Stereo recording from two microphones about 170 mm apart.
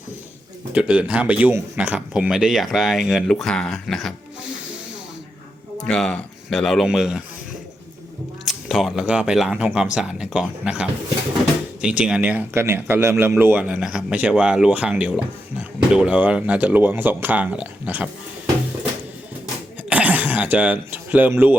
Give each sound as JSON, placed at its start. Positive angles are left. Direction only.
{"t": 0.7, "sound": "speech", "side_deg": -10}
{"t": 5.7, "sound": "speech", "side_deg": 5}
{"t": 8.4, "sound": "speech", "side_deg": 0}
{"t": 19.9, "sound": "throat clearing", "side_deg": -10}